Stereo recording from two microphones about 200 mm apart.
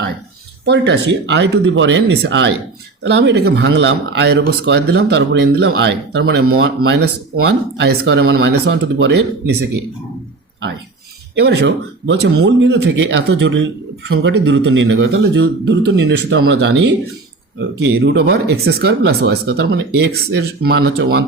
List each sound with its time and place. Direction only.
0.6 s speech: 60° right (ahead or behind)
8.7 s speech: 60° right (ahead or behind)
11.3 s speech: 60° right (ahead or behind)